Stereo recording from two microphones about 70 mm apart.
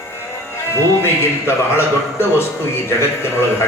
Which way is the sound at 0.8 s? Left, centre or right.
Left.